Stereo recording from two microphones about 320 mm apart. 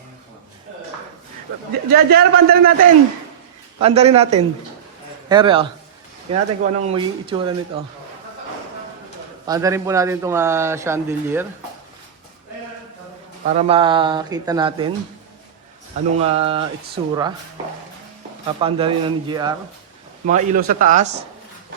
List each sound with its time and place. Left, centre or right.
1.9 s a man's voice: right
9.5 s a man's voice: centre
13.5 s a man's voice: centre
16.1 s a man's voice: centre
18.6 s a man's voice: centre
20.2 s speech: right